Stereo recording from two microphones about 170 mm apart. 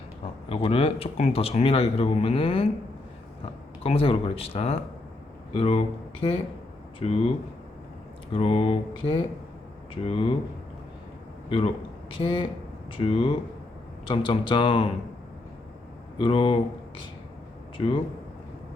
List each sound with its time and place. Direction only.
0.4 s speech: 30° left (ahead or behind)
3.8 s speech: 35° left (ahead or behind)
8.3 s speech: 30° left (ahead or behind)
11.4 s a man's voice: 30° left (ahead or behind)
16.1 s speech: 30° left (ahead or behind)
17.7 s a man's voice: 30° left (ahead or behind)